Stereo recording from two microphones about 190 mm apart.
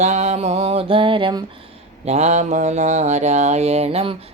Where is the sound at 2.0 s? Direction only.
35° right (ahead or behind).